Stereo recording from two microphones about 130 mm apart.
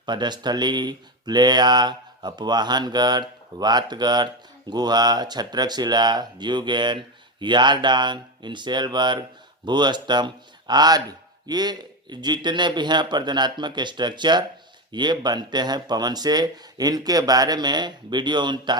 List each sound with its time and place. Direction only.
0.0 s speech: 35° right (ahead or behind)